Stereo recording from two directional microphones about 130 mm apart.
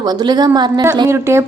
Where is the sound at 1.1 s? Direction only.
20° right (ahead or behind).